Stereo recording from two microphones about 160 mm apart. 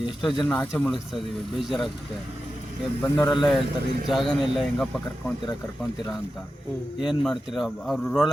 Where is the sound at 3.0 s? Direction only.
25° left (ahead or behind).